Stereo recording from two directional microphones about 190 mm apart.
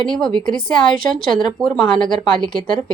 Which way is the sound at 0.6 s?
25° left (ahead or behind).